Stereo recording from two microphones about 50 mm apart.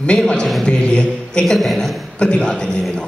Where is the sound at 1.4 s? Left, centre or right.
Centre.